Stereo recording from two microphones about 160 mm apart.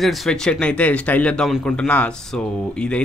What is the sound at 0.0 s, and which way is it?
Speech, centre (ahead or behind).